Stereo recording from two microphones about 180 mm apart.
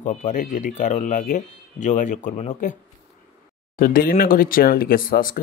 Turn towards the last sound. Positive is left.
turn(degrees=50)  # may be behind; listen again after turning